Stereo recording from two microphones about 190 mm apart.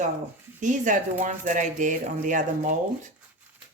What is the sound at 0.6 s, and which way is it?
Speech, 40° right (ahead or behind).